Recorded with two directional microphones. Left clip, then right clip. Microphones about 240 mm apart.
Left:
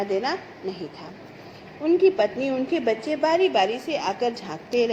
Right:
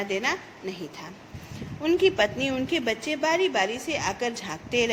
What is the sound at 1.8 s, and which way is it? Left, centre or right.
A woman's voice, right.